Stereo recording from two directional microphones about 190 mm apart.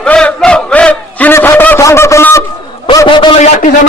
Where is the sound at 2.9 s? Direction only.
25° left (ahead or behind).